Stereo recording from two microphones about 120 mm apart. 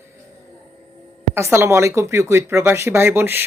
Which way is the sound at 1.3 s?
20° right (ahead or behind).